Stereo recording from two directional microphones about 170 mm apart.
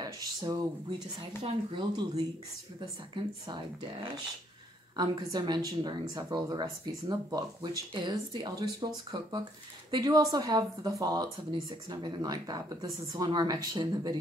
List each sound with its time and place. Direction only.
0.0 s a woman's voice: 25° right (ahead or behind)
4.9 s a woman's voice: 25° right (ahead or behind)